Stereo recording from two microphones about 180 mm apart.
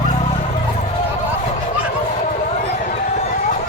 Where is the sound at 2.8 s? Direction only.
40° left (ahead or behind).